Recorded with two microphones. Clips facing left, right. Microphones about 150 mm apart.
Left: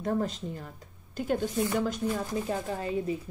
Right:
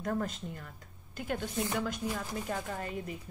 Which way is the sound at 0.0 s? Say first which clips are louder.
Left 4 dB; 25° left (ahead or behind).